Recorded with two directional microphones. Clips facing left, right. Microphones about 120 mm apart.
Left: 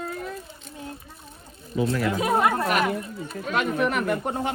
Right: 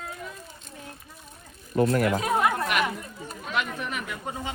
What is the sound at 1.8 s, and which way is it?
Speech, 60° right (ahead or behind).